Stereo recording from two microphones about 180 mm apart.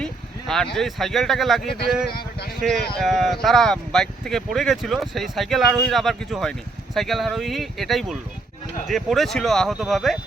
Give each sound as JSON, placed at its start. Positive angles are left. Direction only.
{"t": 0.0, "sound": "speech", "side_deg": 5}
{"t": 2.0, "sound": "a sound", "side_deg": 60}
{"t": 2.6, "sound": "speech", "side_deg": 0}